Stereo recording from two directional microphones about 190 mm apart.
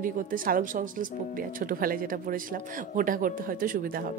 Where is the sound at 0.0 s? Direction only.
45° right (ahead or behind).